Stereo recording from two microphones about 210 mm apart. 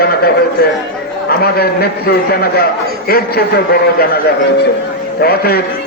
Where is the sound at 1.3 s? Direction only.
50° left (ahead or behind).